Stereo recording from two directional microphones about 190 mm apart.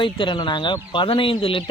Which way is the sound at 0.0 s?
25° left (ahead or behind).